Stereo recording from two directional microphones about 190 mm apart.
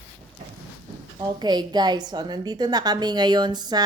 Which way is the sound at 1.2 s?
20° right (ahead or behind).